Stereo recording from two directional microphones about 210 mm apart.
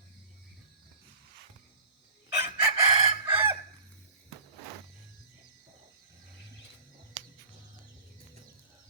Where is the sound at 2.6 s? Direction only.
25° right (ahead or behind).